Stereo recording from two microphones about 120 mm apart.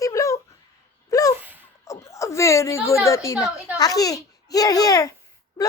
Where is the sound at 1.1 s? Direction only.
30° left (ahead or behind).